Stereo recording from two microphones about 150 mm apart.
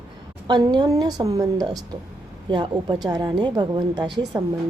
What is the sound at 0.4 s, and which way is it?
A woman's voice, 30° right (ahead or behind).